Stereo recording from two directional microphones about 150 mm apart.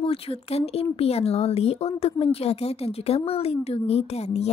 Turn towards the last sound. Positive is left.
turn(degrees=45)  # may be behind; listen again after turning